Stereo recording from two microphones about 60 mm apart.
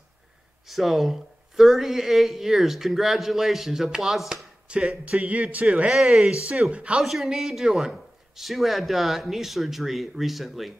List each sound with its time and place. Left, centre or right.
0.7 s speech: centre
4.6 s speech: centre
7.0 s speech: centre